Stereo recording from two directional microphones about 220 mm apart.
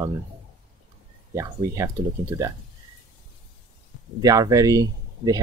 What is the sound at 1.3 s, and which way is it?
Speech, 15° right (ahead or behind).